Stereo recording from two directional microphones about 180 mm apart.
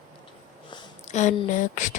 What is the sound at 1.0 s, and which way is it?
Speech, 40° left (ahead or behind).